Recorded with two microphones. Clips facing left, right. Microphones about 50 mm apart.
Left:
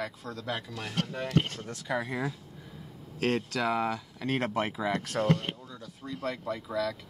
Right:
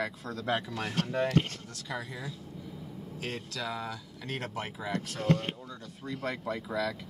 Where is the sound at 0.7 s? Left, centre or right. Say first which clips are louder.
Right 2 dB; right.